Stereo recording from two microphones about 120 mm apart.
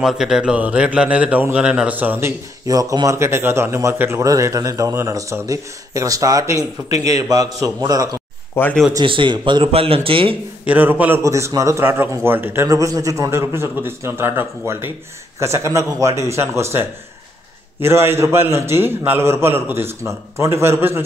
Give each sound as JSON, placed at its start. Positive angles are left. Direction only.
{"t": 0.0, "sound": "speech", "side_deg": -5}
{"t": 2.6, "sound": "a man's voice", "side_deg": -30}
{"t": 8.6, "sound": "speech", "side_deg": 20}
{"t": 9.0, "sound": "speech", "side_deg": -45}
{"t": 10.6, "sound": "speech", "side_deg": -15}
{"t": 17.8, "sound": "speech", "side_deg": -20}